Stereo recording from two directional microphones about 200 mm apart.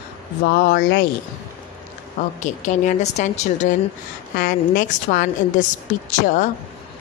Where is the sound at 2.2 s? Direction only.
35° left (ahead or behind).